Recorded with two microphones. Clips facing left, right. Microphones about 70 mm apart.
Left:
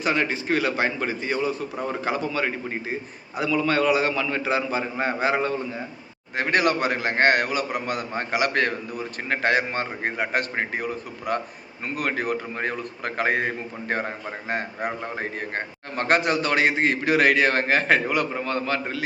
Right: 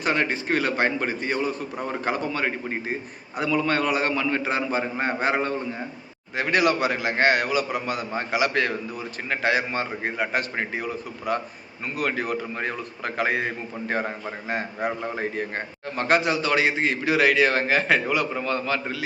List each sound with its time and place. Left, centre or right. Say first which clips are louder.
0.0 s a man's voice: even; right
6.3 s a man's voice: even; left
11.9 s a man's voice: even; left
15.2 s a man's voice: right 1 dB; left